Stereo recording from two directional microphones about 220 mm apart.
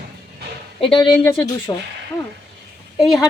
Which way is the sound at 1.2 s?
15° left (ahead or behind).